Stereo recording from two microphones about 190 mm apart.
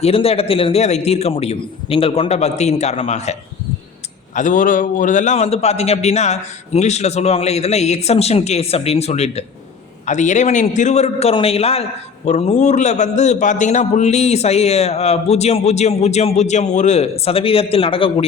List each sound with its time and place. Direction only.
0.0 s a man's voice: 30° left (ahead or behind)
4.4 s a man's voice: 45° left (ahead or behind)